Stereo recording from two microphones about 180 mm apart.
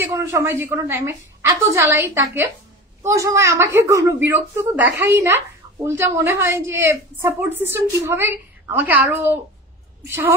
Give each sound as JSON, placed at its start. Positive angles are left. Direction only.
{"t": 0.1, "sound": "a woman's voice", "side_deg": -15}